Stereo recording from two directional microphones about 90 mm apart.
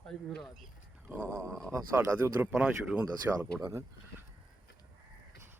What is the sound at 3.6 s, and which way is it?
Speech, 35° right (ahead or behind).